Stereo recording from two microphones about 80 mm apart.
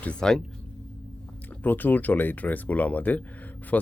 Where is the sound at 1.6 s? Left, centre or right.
Left.